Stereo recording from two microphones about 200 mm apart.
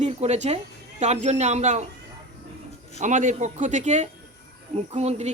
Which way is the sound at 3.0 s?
35° right (ahead or behind).